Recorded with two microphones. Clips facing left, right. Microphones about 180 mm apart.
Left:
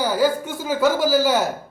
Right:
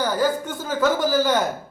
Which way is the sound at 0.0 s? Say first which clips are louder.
Left 2 dB; 10° left (ahead or behind).